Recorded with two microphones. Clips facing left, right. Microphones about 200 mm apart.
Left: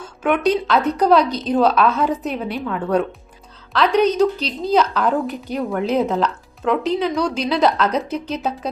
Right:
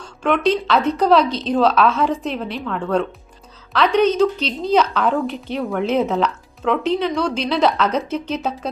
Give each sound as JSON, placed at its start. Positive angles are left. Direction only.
{"t": 0.0, "sound": "a woman's voice", "side_deg": 5}
{"t": 5.2, "sound": "a woman's voice", "side_deg": 45}
{"t": 5.5, "sound": "a woman's voice", "side_deg": 0}